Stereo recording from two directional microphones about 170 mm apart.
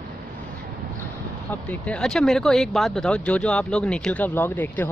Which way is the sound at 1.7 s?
5° left (ahead or behind).